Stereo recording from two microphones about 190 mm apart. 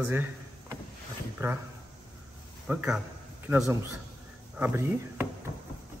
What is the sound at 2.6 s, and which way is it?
A man's voice, 5° right (ahead or behind).